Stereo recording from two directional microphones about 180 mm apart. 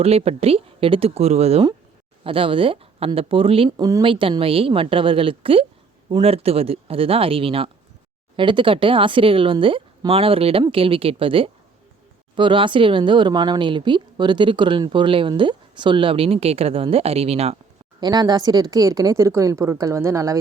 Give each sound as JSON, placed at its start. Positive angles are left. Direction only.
{"t": 0.0, "sound": "speech", "side_deg": -35}
{"t": 3.7, "sound": "a woman's voice", "side_deg": -20}
{"t": 18.0, "sound": "a woman's voice", "side_deg": -20}